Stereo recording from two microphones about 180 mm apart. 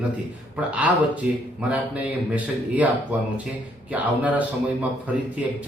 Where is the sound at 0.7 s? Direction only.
5° right (ahead or behind).